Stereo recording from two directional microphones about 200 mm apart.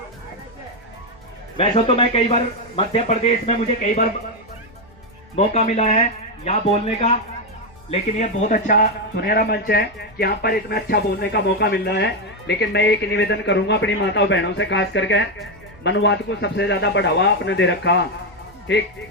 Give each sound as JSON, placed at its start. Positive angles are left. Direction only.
{"t": 1.5, "sound": "speech", "side_deg": 30}
{"t": 3.8, "sound": "speech", "side_deg": 45}
{"t": 5.5, "sound": "speech", "side_deg": 35}
{"t": 8.2, "sound": "speech", "side_deg": 40}